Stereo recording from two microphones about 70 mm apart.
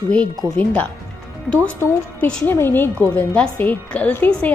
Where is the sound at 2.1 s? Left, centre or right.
Centre.